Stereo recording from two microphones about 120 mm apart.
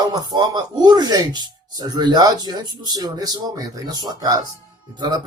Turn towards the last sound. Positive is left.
turn(degrees=-35)  # may be behind; listen again after turning